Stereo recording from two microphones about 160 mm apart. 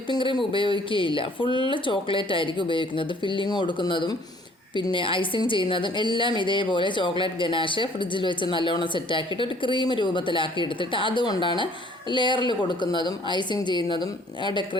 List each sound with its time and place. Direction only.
0.1 s a woman's voice: 30° left (ahead or behind)